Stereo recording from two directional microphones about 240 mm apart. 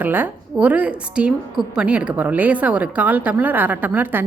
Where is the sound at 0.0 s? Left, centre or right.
Centre.